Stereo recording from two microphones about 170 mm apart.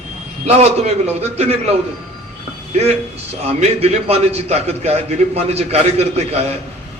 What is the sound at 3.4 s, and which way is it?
A man's voice, 35° right (ahead or behind).